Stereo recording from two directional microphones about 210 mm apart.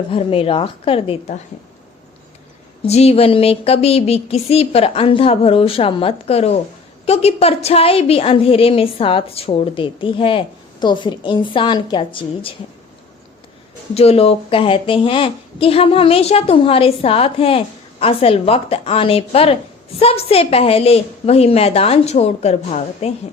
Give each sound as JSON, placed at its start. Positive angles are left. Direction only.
{"t": 0.1, "sound": "a woman's voice", "side_deg": 25}
{"t": 2.8, "sound": "a woman's voice", "side_deg": 30}
{"t": 13.9, "sound": "a woman's voice", "side_deg": 30}